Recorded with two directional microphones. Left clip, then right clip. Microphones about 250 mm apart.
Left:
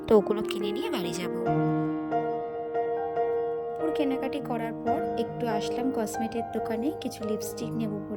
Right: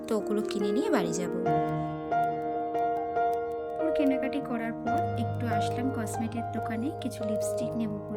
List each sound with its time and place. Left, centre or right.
0.1 s speech: left
3.9 s speech: left
5.5 s speech: centre